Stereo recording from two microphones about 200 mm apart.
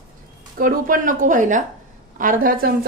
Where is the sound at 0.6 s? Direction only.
45° right (ahead or behind).